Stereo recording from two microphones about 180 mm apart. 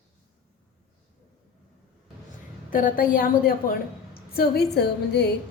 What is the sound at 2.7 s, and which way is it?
A woman's voice, 50° left (ahead or behind).